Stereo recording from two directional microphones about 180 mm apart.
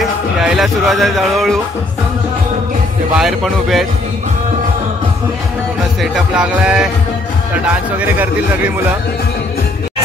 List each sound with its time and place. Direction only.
0.0 s music: centre (ahead or behind)
3.2 s speech: centre (ahead or behind)
6.1 s speech: 5° right (ahead or behind)
8.0 s speech: 10° right (ahead or behind)